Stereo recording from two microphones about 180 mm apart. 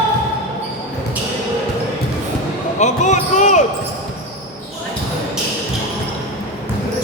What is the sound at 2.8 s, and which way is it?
Basketball bounce, 40° left (ahead or behind).